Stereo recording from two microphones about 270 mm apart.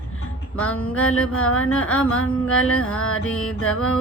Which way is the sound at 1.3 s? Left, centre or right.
Left.